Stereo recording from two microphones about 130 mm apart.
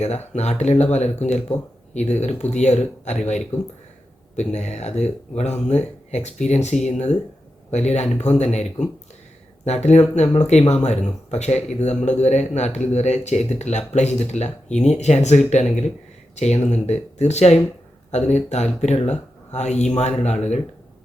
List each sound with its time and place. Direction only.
0.3 s speech: 60° left (ahead or behind)
9.6 s speech: 60° left (ahead or behind)